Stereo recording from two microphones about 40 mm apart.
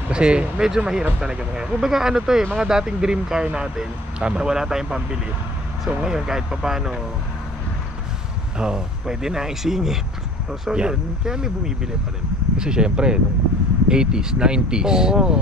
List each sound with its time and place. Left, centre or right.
0.1 s speech: right
8.5 s speech: centre
10.7 s speech: centre